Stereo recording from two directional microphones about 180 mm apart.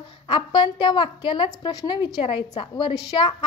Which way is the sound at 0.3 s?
25° left (ahead or behind).